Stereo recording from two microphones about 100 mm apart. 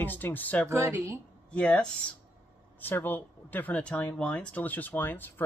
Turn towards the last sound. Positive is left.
turn(degrees=20)  # may be behind; listen again after turning